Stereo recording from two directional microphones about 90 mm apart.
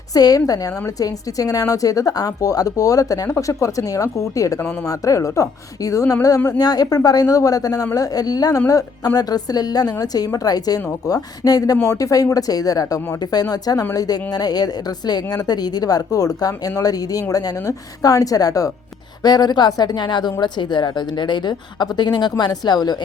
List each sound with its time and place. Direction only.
0.1 s a woman's voice: 45° left (ahead or behind)